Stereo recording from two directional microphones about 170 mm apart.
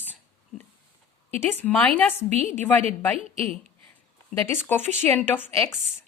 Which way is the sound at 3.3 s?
35° right (ahead or behind).